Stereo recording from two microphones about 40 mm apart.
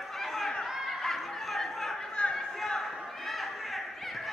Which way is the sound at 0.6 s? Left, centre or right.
Centre.